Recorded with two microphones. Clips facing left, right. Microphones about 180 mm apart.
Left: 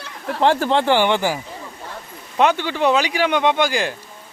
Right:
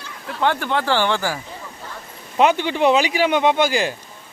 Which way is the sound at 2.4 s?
10° right (ahead or behind).